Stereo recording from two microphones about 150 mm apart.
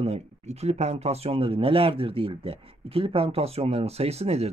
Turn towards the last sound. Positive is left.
turn(degrees=-45)  # may be behind; listen again after turning